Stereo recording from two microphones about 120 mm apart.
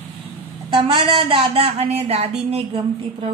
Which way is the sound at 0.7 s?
45° right (ahead or behind).